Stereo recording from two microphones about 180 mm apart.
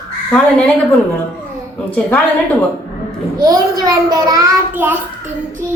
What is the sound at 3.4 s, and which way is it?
A child's voice, 20° right (ahead or behind).